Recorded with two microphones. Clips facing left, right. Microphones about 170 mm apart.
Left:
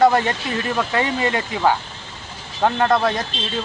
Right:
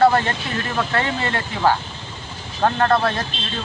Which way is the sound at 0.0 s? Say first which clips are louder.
Even; 15° left (ahead or behind).